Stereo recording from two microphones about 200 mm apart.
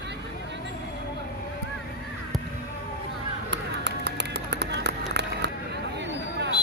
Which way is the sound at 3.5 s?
60° right (ahead or behind).